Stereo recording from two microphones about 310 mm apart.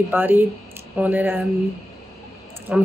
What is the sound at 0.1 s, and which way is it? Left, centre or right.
A woman's voice, centre.